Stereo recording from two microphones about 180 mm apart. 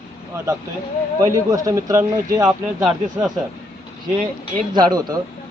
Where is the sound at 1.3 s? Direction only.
20° right (ahead or behind).